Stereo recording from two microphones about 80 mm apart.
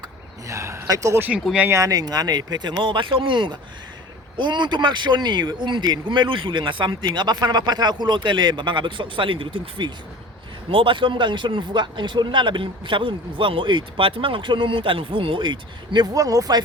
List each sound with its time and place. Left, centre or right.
0.4 s speech: right
16.1 s speech: right